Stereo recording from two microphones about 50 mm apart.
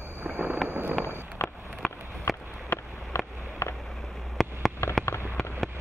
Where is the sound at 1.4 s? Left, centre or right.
Left.